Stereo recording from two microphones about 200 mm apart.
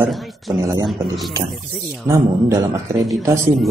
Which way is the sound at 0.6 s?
20° right (ahead or behind).